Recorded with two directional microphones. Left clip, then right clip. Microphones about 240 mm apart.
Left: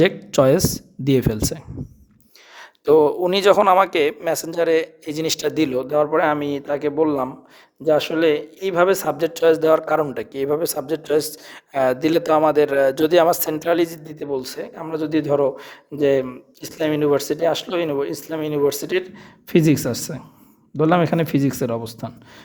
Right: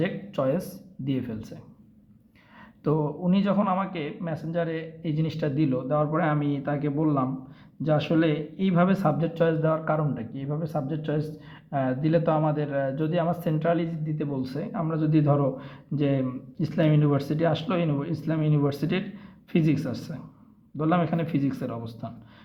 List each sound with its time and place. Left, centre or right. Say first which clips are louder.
0.0 s speech: left 12 dB; left